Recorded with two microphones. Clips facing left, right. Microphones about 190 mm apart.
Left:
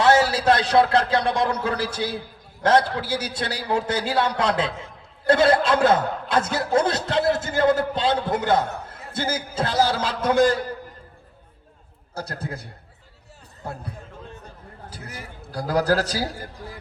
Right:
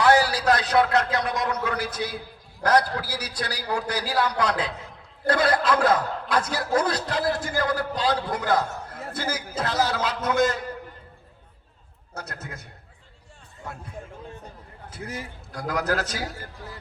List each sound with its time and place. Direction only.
0.0 s a man's voice: 25° left (ahead or behind)
12.1 s a man's voice: 30° left (ahead or behind)
15.5 s a man's voice: 30° left (ahead or behind)